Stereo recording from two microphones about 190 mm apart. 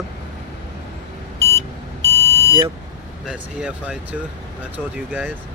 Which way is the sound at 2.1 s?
15° left (ahead or behind).